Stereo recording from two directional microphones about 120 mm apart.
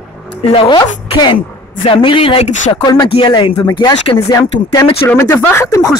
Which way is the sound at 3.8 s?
45° left (ahead or behind).